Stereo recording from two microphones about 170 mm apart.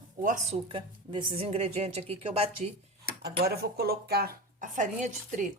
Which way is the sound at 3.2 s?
65° right (ahead or behind).